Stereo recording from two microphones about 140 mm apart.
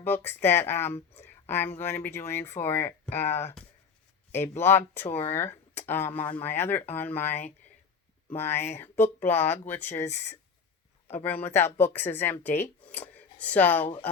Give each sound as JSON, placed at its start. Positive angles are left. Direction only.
{"t": 0.0, "sound": "speech", "side_deg": 15}
{"t": 10.0, "sound": "speech", "side_deg": 55}
{"t": 11.1, "sound": "speech", "side_deg": 15}